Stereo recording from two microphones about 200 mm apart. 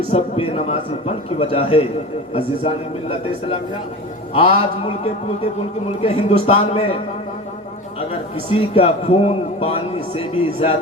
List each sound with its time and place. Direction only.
0.1 s a man's voice: 30° left (ahead or behind)
6.0 s a man's voice: 30° left (ahead or behind)
8.4 s a man's voice: 30° left (ahead or behind)